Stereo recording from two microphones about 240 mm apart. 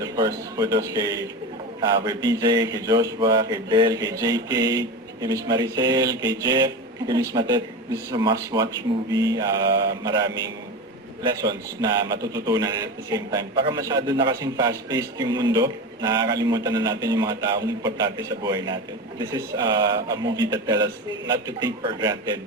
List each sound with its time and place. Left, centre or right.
0.0 s a man's voice: centre